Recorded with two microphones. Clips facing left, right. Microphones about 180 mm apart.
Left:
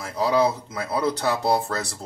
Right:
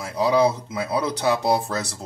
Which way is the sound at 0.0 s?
15° right (ahead or behind).